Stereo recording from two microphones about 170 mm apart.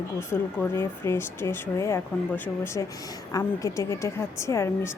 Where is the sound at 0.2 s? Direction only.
15° left (ahead or behind).